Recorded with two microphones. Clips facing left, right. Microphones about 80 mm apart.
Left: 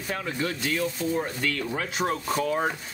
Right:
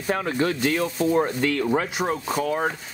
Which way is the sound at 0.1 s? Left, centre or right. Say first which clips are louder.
Right 7 dB; right.